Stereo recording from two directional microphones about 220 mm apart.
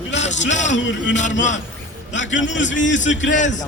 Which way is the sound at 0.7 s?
55° left (ahead or behind).